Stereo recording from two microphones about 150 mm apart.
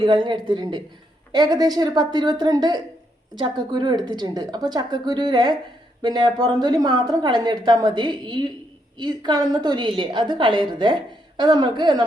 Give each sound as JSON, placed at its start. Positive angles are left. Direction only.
{"t": 0.0, "sound": "a woman's voice", "side_deg": -35}